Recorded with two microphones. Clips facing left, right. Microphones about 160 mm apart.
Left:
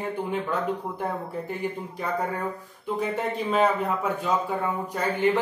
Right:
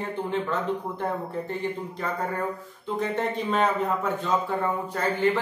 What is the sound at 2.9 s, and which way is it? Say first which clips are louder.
A man's voice: right 1 dB; 5° left (ahead or behind).